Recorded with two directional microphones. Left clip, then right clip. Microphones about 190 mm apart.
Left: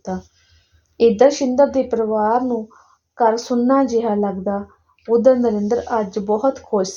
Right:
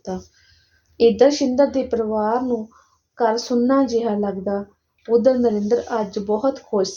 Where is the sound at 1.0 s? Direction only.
40° left (ahead or behind).